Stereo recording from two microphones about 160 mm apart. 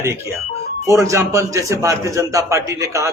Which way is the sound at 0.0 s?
15° right (ahead or behind).